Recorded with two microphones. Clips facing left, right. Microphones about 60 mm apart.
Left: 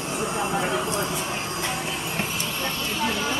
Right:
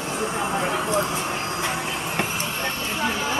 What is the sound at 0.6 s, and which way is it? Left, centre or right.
Vehicle, right.